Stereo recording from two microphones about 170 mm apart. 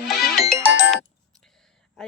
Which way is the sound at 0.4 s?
65° left (ahead or behind).